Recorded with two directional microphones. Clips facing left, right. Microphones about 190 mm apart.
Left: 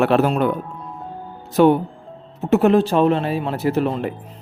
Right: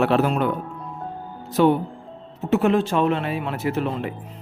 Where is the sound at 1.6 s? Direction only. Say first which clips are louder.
Left 4 dB; 55° left (ahead or behind).